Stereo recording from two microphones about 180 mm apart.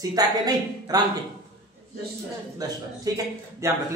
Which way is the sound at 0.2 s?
20° right (ahead or behind).